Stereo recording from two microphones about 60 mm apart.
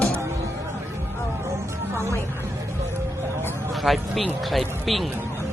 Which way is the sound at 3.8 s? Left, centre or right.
Centre.